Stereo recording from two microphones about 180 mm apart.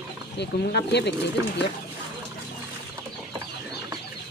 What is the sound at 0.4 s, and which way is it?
Speech, 65° left (ahead or behind).